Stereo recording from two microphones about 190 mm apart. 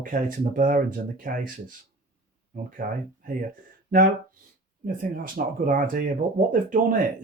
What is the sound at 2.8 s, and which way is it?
Speech, 45° right (ahead or behind).